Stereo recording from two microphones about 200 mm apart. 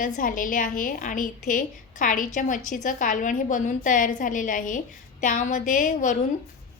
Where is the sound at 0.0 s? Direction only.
40° left (ahead or behind).